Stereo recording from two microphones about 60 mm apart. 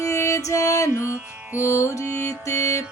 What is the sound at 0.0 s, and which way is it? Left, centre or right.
Music, left.